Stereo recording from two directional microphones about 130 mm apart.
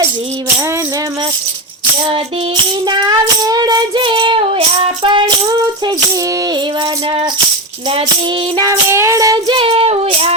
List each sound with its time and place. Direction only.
2.8 s child singing: 30° right (ahead or behind)
8.5 s child singing: 30° right (ahead or behind)
9.6 s child singing: 45° right (ahead or behind)